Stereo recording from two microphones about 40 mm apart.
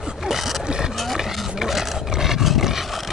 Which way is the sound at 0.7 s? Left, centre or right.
Centre.